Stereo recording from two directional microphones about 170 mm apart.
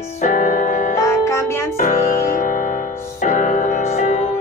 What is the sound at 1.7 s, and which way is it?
Music, 50° left (ahead or behind).